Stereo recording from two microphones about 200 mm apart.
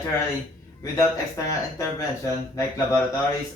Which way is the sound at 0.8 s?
15° left (ahead or behind).